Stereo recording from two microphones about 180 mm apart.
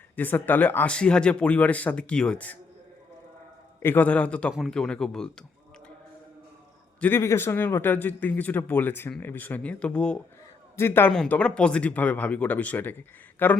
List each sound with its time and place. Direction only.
0.2 s a man's voice: 10° left (ahead or behind)
3.8 s speech: 10° left (ahead or behind)
7.0 s a man's voice: 15° left (ahead or behind)